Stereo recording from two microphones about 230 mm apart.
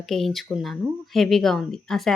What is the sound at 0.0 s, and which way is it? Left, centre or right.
Speech, centre.